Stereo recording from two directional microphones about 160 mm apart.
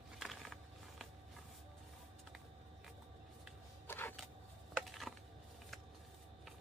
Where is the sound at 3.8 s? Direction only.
15° left (ahead or behind).